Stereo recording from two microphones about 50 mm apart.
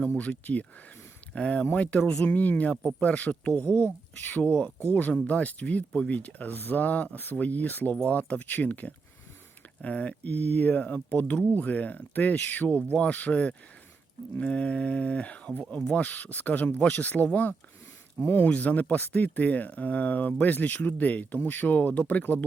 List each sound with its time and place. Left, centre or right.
0.2 s speech: left
3.6 s speech: left
18.2 s speech: left
18.4 s speech: left